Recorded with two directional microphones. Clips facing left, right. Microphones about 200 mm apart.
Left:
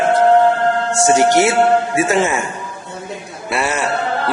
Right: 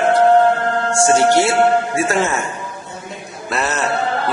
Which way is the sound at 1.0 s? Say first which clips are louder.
Left 1 dB; 15° left (ahead or behind).